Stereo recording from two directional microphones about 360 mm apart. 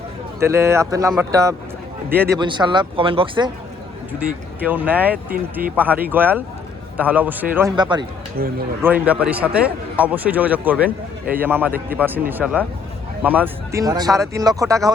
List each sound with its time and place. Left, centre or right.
0.3 s a man's voice: centre
8.4 s speech: right
8.8 s a man's voice: centre